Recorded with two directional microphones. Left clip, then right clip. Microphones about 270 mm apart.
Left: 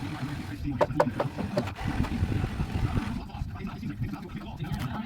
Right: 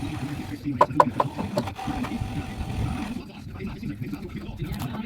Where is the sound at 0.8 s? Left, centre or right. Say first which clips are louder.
Right 7 dB; centre.